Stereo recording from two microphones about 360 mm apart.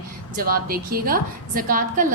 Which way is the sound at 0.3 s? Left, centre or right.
Right.